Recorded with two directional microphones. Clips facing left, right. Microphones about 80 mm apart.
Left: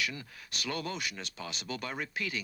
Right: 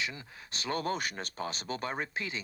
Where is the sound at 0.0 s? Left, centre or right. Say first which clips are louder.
Left 1 dB; right.